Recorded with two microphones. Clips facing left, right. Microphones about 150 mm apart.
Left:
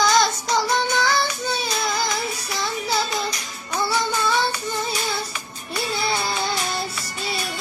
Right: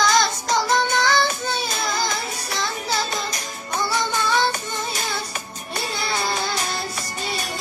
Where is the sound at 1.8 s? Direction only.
Centre (ahead or behind).